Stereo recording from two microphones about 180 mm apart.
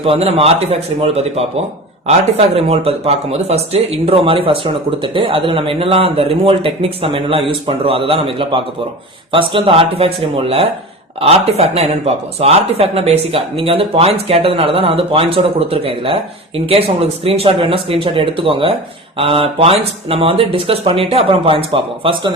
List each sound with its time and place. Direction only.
0.0 s speech: 30° right (ahead or behind)